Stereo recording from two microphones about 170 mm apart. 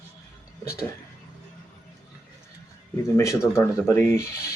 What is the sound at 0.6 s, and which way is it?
Speech, 15° left (ahead or behind).